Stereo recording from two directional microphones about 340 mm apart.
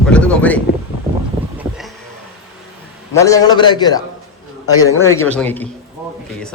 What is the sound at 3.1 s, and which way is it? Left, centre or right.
A man's voice, centre.